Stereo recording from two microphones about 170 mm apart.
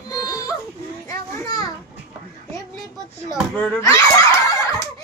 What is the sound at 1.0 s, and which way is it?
Children playing, 20° left (ahead or behind).